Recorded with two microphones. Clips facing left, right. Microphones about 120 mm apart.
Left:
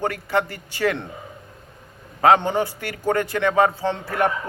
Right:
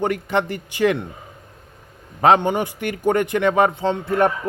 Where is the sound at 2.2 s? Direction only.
20° right (ahead or behind).